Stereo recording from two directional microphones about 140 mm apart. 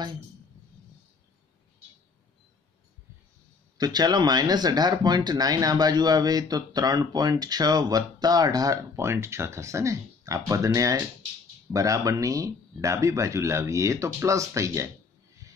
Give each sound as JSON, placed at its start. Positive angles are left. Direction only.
{"t": 3.7, "sound": "speech", "side_deg": -30}
{"t": 15.4, "sound": "music", "side_deg": -20}